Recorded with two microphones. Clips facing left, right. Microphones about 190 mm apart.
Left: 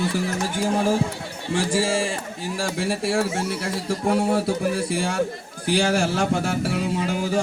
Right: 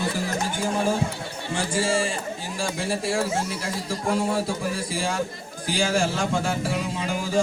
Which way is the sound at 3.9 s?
65° left (ahead or behind).